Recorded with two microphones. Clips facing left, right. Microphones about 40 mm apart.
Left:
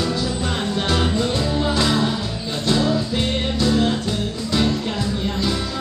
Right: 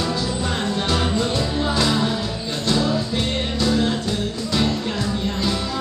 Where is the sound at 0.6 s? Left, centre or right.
Centre.